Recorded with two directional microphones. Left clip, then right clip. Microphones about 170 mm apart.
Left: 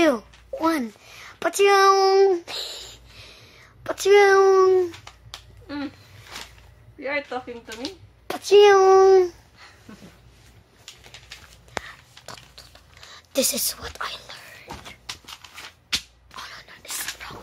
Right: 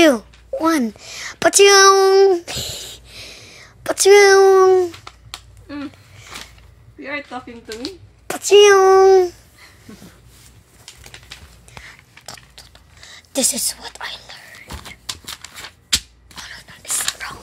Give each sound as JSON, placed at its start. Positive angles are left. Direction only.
{"t": 0.0, "sound": "speech", "side_deg": -15}
{"t": 2.0, "sound": "a sound", "side_deg": -5}
{"t": 4.5, "sound": "a sound", "side_deg": -10}
{"t": 5.7, "sound": "speech", "side_deg": 25}
{"t": 7.0, "sound": "a woman's voice", "side_deg": 10}
{"t": 8.3, "sound": "speech", "side_deg": -5}
{"t": 8.8, "sound": "child singing", "side_deg": 0}
{"t": 11.8, "sound": "a sound", "side_deg": 5}
{"t": 14.9, "sound": "shuffling cards", "side_deg": -35}
{"t": 16.4, "sound": "whispering", "side_deg": 5}
{"t": 17.2, "sound": "whispering", "side_deg": -10}